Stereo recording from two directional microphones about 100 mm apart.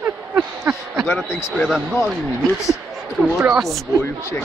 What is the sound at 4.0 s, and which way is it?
Speech, 25° left (ahead or behind).